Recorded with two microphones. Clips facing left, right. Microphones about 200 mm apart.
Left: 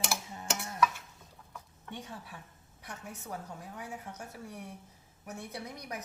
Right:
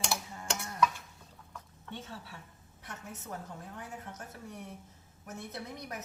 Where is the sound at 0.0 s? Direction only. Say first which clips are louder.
Even; 5° left (ahead or behind).